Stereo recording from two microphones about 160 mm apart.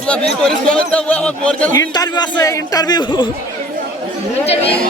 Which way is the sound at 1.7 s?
25° left (ahead or behind).